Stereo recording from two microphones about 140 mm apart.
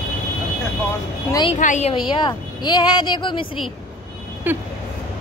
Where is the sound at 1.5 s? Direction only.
55° left (ahead or behind).